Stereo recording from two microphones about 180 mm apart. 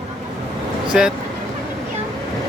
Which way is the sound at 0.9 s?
5° right (ahead or behind).